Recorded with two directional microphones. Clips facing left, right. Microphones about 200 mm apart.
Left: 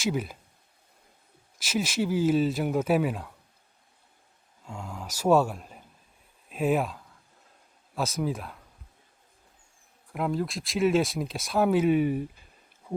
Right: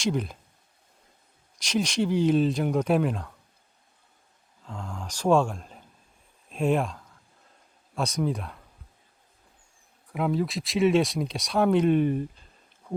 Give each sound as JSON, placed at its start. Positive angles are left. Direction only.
{"t": 0.0, "sound": "speech", "side_deg": 5}
{"t": 1.5, "sound": "speech", "side_deg": 5}
{"t": 4.6, "sound": "speech", "side_deg": 10}
{"t": 10.1, "sound": "speech", "side_deg": 0}